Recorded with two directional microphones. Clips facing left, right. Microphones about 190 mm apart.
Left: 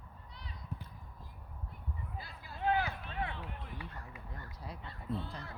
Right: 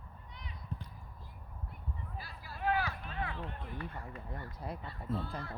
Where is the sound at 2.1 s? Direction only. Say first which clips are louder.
Left 1 dB; 20° left (ahead or behind).